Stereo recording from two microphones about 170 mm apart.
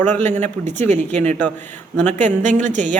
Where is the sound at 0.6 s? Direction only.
40° right (ahead or behind).